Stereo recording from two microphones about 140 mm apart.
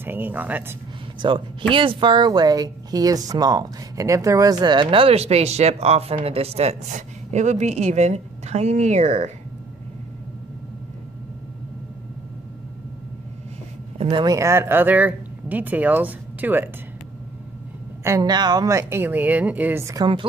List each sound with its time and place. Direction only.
0.0 s speech: 15° right (ahead or behind)
1.2 s a woman's voice: 35° right (ahead or behind); by 9.3 s 55° right (ahead or behind)
13.9 s a sound: 45° right (ahead or behind)
14.2 s speech: 20° right (ahead or behind)
18.0 s a woman's voice: 25° right (ahead or behind)